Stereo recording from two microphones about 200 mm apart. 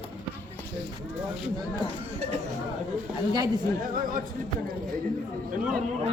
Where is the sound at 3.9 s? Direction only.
45° right (ahead or behind).